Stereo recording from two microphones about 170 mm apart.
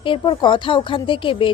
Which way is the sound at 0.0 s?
30° left (ahead or behind).